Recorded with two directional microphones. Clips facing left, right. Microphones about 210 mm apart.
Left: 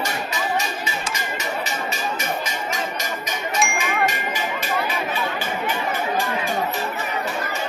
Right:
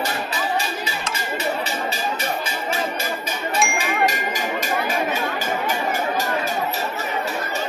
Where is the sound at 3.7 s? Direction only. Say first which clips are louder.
Right 1 dB; 40° right (ahead or behind).